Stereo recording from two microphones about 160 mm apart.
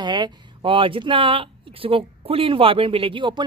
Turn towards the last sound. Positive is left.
turn(degrees=-30)  # may be behind; listen again after turning